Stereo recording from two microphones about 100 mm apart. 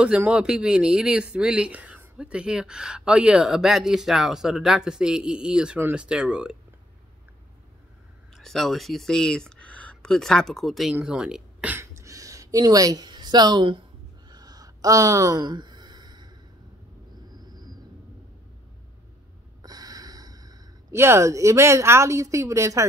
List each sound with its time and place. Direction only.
0.0 s speech: 10° right (ahead or behind)
5.8 s speech: 20° right (ahead or behind)
6.0 s speech: 10° right (ahead or behind)
8.4 s speech: 5° left (ahead or behind)
11.7 s a sound: 30° right (ahead or behind)
12.6 s a woman's voice: 40° right (ahead or behind); by 13.8 s 55° right (ahead or behind)
14.3 s a sound: 40° right (ahead or behind)
19.6 s snort: 40° right (ahead or behind)
20.9 s a woman's voice: 25° right (ahead or behind)